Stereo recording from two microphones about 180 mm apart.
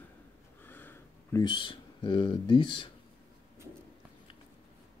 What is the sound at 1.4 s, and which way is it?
Speech, 25° left (ahead or behind).